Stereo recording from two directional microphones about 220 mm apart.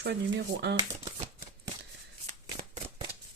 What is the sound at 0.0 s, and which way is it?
Speech, 50° right (ahead or behind).